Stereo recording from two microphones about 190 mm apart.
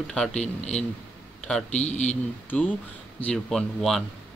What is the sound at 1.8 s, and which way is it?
Speech, 35° left (ahead or behind).